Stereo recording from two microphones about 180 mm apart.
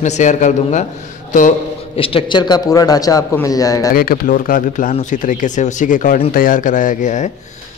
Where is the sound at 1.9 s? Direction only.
30° left (ahead or behind).